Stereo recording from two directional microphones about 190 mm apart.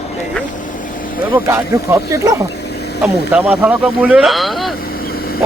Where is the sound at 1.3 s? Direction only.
15° right (ahead or behind).